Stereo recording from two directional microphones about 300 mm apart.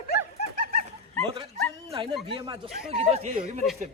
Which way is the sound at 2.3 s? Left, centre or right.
Centre.